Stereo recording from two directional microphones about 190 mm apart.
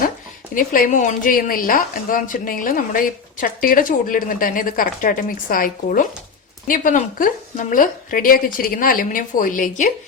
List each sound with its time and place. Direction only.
0.5 s speech: 45° left (ahead or behind)